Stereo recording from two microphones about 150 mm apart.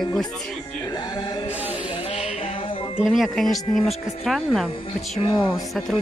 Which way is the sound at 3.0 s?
Centre (ahead or behind).